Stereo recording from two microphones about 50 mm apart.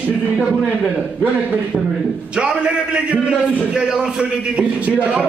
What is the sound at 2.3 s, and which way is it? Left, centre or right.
Speech, centre.